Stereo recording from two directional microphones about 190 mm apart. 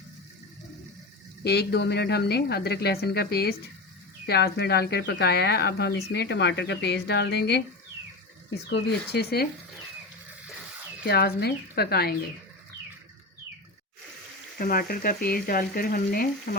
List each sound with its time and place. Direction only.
1.5 s speech: 60° left (ahead or behind)
8.7 s speech: 60° left (ahead or behind)
11.0 s speech: 60° left (ahead or behind)
14.6 s speech: 50° left (ahead or behind)